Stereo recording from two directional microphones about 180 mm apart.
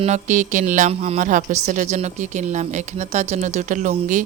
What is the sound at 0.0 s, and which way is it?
Speech, 40° right (ahead or behind).